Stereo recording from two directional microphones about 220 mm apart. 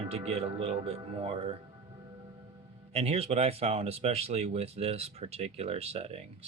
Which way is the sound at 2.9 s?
30° right (ahead or behind).